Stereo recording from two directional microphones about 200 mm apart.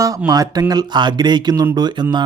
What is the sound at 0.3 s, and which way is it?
Speech, 20° right (ahead or behind).